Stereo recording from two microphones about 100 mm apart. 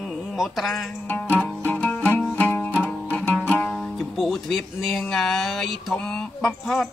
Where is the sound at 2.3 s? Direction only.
20° left (ahead or behind).